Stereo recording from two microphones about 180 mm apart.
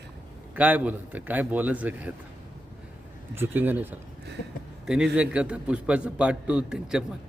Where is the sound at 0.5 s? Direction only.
10° right (ahead or behind).